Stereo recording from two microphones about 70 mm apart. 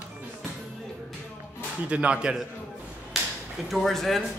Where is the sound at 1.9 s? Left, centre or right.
Centre.